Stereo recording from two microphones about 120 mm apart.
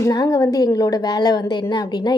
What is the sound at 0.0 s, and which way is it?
A woman's voice, 30° left (ahead or behind).